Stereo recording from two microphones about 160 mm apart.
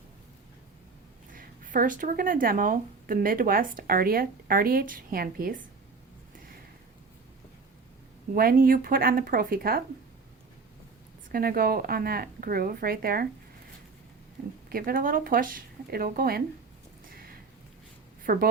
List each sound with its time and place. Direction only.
1.3 s speech: 55° right (ahead or behind)
8.4 s speech: 65° right (ahead or behind)
11.3 s speech: 65° right (ahead or behind)
14.7 s speech: 65° right (ahead or behind)
18.2 s a sound: 65° right (ahead or behind)